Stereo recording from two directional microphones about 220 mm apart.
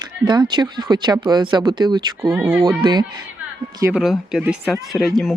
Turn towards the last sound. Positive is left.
turn(degrees=0)  # may be behind; listen again after turning